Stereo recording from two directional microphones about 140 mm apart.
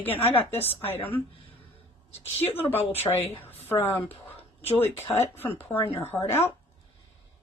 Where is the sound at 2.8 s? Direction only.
45° left (ahead or behind).